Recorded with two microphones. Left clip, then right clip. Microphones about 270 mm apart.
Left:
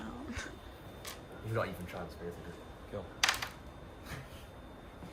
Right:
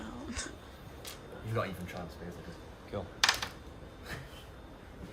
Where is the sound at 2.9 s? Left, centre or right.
Right.